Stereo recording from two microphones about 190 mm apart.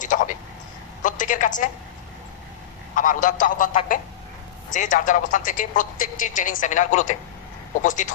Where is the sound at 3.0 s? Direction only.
45° left (ahead or behind).